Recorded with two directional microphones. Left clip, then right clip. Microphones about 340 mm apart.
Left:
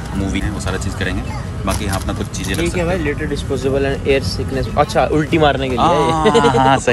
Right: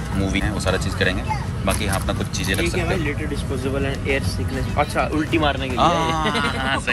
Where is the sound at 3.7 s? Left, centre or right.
Left.